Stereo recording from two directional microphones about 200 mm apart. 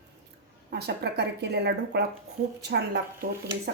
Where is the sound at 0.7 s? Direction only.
55° right (ahead or behind).